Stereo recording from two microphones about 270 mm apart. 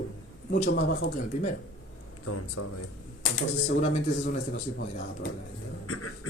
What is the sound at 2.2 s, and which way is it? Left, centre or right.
Speech, left.